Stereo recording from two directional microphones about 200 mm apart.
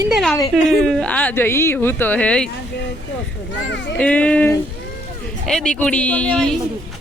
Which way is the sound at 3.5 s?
60° left (ahead or behind).